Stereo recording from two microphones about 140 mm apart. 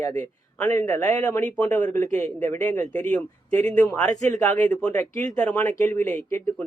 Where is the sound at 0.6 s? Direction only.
10° left (ahead or behind).